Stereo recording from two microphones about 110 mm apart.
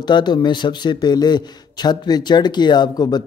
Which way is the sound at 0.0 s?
40° left (ahead or behind).